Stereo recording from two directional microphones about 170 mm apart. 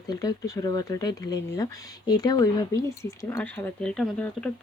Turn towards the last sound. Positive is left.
turn(degrees=5)  # may be behind; listen again after turning